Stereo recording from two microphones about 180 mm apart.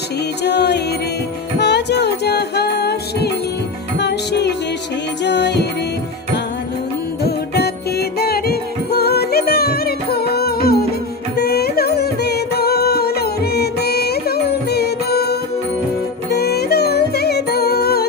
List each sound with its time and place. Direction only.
0.4 s music: 70° left (ahead or behind)
7.2 s music: 65° left (ahead or behind)